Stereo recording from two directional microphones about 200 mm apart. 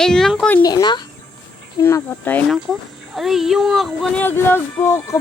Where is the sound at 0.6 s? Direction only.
20° left (ahead or behind).